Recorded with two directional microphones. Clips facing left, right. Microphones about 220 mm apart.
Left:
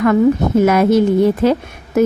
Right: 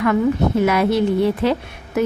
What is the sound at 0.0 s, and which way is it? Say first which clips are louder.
A woman's voice: left 5 dB; 45° left (ahead or behind).